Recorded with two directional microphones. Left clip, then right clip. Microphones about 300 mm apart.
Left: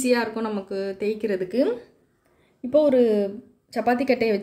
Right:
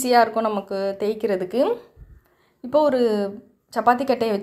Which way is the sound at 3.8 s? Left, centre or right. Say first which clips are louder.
Right 2 dB; right.